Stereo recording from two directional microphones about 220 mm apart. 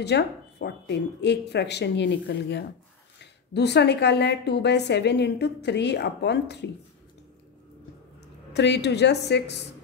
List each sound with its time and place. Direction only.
0.0 s a woman's voice: 50° left (ahead or behind)
8.5 s a woman's voice: 50° left (ahead or behind)